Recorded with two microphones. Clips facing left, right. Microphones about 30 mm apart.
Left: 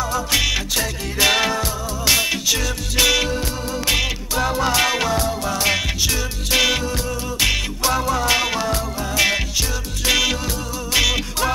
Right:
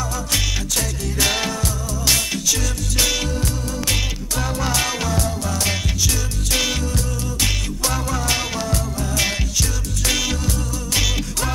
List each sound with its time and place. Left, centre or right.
0.1 s music: centre